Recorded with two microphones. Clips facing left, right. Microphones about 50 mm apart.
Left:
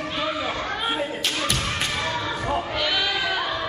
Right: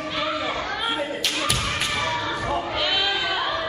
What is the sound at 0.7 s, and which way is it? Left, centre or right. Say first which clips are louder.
Thump: even; centre.